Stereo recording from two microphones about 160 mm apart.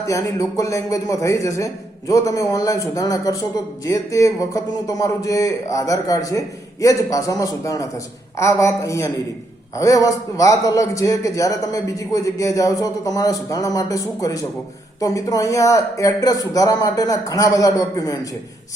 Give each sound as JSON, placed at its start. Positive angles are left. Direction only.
{"t": 0.0, "sound": "speech", "side_deg": 20}